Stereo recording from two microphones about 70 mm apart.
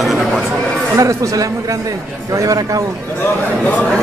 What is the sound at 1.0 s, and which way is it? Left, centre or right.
A man's voice, right.